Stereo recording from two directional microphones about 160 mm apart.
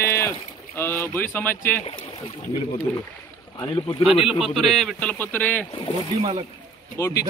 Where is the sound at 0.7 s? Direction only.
15° left (ahead or behind).